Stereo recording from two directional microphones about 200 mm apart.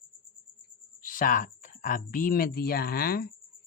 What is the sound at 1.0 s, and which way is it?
Speech, 40° left (ahead or behind).